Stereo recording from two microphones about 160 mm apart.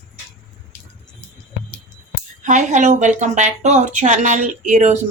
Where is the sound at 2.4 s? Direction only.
50° right (ahead or behind).